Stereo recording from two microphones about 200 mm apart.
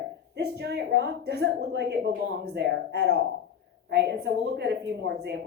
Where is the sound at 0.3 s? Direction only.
55° right (ahead or behind).